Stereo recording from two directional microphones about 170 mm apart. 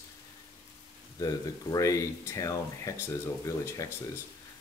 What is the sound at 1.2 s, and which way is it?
Speech, 20° left (ahead or behind).